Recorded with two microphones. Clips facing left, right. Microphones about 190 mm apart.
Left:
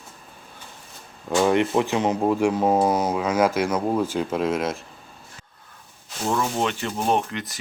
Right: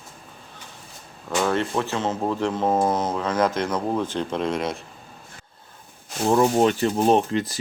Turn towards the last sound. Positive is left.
turn(degrees=-30)  # may be behind; listen again after turning